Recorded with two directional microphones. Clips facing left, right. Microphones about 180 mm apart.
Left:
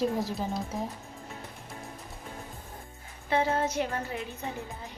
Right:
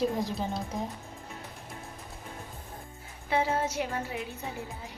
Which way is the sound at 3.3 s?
10° right (ahead or behind).